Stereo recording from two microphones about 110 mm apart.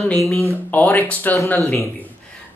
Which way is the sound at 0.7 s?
15° left (ahead or behind).